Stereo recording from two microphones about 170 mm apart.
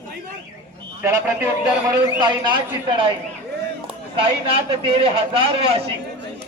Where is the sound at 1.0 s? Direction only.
15° right (ahead or behind).